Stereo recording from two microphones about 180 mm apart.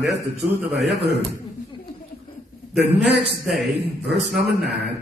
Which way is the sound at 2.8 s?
65° right (ahead or behind).